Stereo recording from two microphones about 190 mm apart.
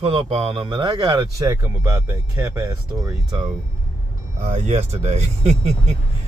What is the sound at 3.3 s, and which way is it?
Speech, 25° right (ahead or behind).